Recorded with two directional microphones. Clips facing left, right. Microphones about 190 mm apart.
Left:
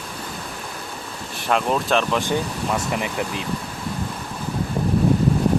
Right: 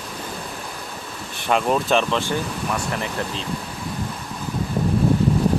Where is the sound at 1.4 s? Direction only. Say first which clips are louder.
Right 1 dB; centre (ahead or behind).